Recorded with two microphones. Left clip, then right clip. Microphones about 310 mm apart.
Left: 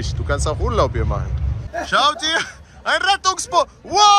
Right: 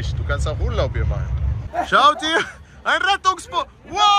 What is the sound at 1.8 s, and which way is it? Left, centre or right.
Speech, centre.